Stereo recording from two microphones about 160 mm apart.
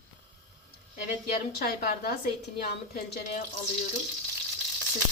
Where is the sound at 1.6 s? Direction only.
70° left (ahead or behind).